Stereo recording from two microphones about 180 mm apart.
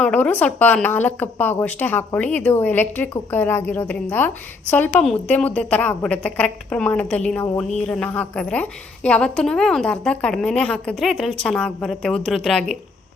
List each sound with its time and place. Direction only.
0.0 s a woman's voice: 10° left (ahead or behind)